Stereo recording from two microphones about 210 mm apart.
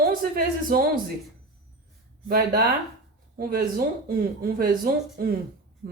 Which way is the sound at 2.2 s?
45° right (ahead or behind).